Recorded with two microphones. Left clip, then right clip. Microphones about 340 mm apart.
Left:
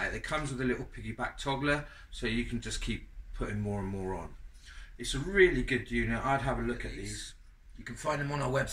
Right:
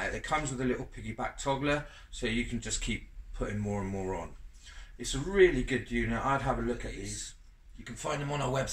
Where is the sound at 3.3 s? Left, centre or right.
Centre.